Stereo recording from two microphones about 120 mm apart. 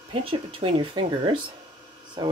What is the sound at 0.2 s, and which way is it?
Speech, 50° right (ahead or behind).